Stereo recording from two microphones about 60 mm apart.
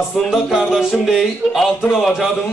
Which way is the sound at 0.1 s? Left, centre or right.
Centre.